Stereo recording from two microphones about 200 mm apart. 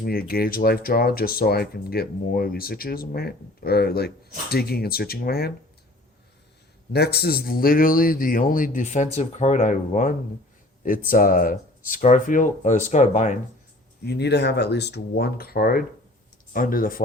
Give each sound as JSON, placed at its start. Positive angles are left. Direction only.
{"t": 0.0, "sound": "speech", "side_deg": 50}
{"t": 6.9, "sound": "speech", "side_deg": 55}
{"t": 14.0, "sound": "speech", "side_deg": 55}